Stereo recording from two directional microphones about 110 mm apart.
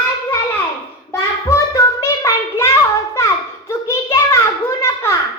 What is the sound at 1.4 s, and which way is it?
Child singing, 25° left (ahead or behind).